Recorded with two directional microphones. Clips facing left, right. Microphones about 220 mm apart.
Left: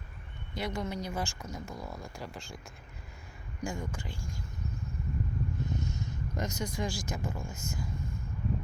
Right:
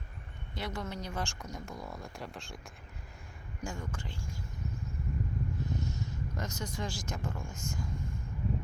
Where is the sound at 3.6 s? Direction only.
10° left (ahead or behind).